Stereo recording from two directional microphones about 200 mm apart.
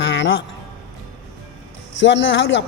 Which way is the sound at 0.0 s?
60° left (ahead or behind).